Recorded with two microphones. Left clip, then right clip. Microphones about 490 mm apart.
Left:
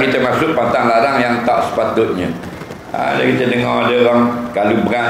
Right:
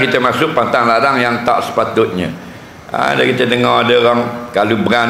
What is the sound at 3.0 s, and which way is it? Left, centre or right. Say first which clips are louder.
A man's voice: right 2 dB; right.